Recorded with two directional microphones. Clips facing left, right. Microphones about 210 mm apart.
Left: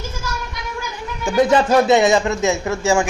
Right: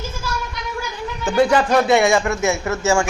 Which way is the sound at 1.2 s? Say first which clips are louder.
Left 1 dB; 15° left (ahead or behind).